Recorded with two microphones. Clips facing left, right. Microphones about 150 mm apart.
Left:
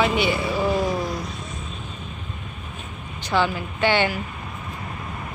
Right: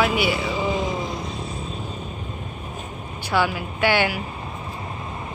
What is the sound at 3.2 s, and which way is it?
Speech, 10° right (ahead or behind).